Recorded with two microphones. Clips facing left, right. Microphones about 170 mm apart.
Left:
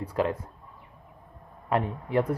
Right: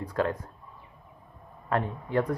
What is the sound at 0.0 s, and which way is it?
Speech, 10° left (ahead or behind).